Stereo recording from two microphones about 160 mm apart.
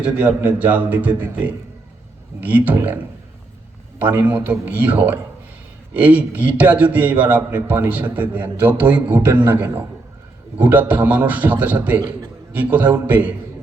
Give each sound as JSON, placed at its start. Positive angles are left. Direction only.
{"t": 0.0, "sound": "a man's voice", "side_deg": -10}
{"t": 11.9, "sound": "a man's voice", "side_deg": -25}
{"t": 12.5, "sound": "a man's voice", "side_deg": -10}